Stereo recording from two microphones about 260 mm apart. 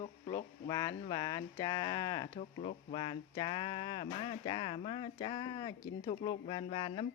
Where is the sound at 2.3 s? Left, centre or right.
Left.